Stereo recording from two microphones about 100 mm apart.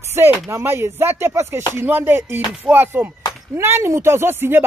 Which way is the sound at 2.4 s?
10° right (ahead or behind).